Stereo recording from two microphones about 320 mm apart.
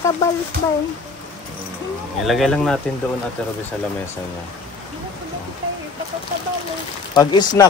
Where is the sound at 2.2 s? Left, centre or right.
Centre.